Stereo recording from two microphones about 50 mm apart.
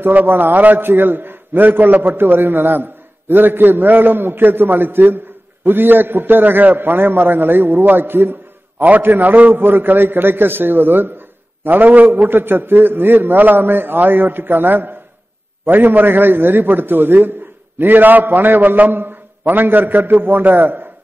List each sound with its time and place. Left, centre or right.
0.0 s a man's voice: right